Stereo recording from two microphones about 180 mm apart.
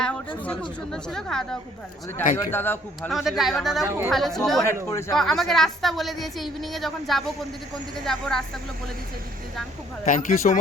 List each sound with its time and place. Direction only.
0.0 s a woman's voice: 5° left (ahead or behind)
3.1 s a woman's voice: centre (ahead or behind)
3.8 s speech: 15° right (ahead or behind)
4.1 s a woman's voice: centre (ahead or behind)
4.9 s a man's voice: 15° left (ahead or behind)
5.1 s a woman's voice: centre (ahead or behind)
10.1 s speech: 45° left (ahead or behind)